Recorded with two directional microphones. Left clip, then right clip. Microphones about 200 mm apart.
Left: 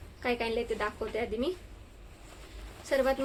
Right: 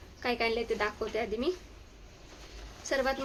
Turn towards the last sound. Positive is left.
turn(degrees=-15)  # may be behind; listen again after turning